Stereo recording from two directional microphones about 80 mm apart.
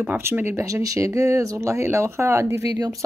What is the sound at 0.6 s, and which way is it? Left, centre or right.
Speech, right.